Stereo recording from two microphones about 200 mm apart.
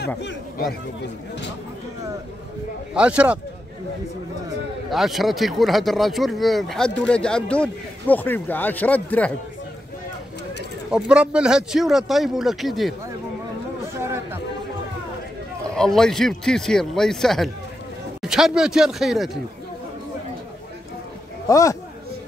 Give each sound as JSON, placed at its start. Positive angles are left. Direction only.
{"t": 0.2, "sound": "speech", "side_deg": 60}
{"t": 2.9, "sound": "speech", "side_deg": -5}
{"t": 4.9, "sound": "speech", "side_deg": 0}
{"t": 10.9, "sound": "speech", "side_deg": -5}
{"t": 14.0, "sound": "chatter", "side_deg": -15}
{"t": 15.7, "sound": "speech", "side_deg": 5}
{"t": 21.5, "sound": "speech", "side_deg": 15}